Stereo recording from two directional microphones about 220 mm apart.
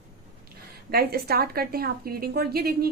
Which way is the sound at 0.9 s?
45° right (ahead or behind).